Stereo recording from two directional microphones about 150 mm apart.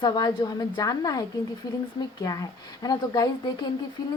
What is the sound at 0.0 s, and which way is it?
A woman's voice, 30° left (ahead or behind).